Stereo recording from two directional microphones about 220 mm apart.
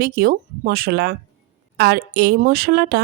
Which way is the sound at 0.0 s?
45° right (ahead or behind).